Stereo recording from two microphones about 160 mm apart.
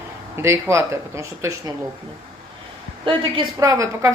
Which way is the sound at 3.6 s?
20° right (ahead or behind).